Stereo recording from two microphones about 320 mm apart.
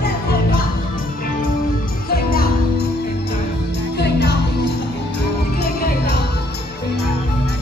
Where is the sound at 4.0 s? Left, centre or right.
Left.